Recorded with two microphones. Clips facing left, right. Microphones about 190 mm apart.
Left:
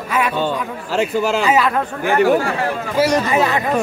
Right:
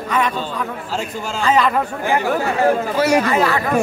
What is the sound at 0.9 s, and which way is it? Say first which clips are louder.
Speech: left 11 dB; 70° left (ahead or behind).